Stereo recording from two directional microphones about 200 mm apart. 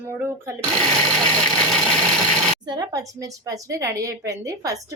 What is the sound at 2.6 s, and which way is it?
A woman's voice, 20° right (ahead or behind).